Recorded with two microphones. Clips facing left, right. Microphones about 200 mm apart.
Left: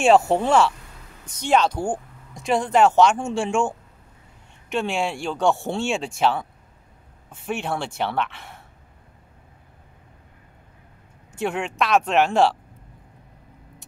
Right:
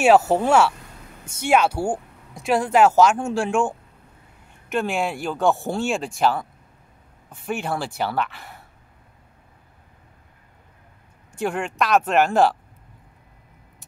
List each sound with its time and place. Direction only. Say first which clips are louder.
0.0 s speech: right 1 dB; 5° right (ahead or behind)
11.3 s speech: even; centre (ahead or behind)